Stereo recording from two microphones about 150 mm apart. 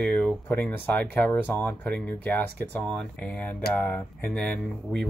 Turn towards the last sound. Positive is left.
turn(degrees=5)  # may be behind; listen again after turning